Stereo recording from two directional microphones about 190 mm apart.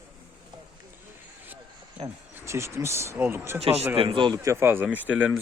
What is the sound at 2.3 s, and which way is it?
Speech, 15° right (ahead or behind).